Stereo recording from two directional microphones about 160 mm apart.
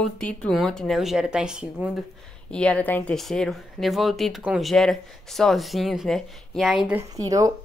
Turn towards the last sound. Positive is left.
turn(degrees=-20)  # may be behind; listen again after turning